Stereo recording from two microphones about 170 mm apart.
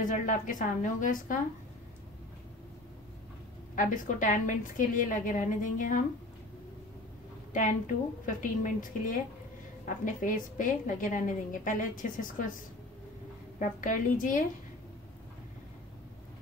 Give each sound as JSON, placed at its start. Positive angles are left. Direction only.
{"t": 0.0, "sound": "a woman's voice", "side_deg": 50}
{"t": 3.7, "sound": "a woman's voice", "side_deg": 50}
{"t": 7.5, "sound": "a woman's voice", "side_deg": 50}
{"t": 13.6, "sound": "a woman's voice", "side_deg": 50}